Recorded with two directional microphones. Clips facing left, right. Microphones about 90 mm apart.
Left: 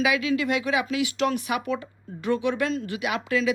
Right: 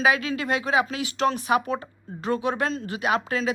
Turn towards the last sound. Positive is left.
turn(degrees=-35)  # may be behind; listen again after turning